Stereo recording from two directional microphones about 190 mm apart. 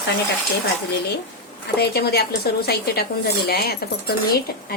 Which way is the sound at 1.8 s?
55° left (ahead or behind).